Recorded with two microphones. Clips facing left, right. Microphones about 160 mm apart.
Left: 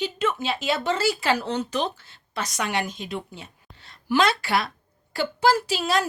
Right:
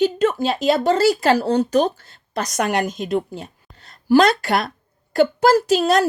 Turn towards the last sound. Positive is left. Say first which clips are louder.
# right 8 dB
turn(degrees=-45)  # may be behind; listen again after turning